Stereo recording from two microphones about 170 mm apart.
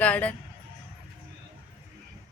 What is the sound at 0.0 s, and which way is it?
Speech, 10° left (ahead or behind).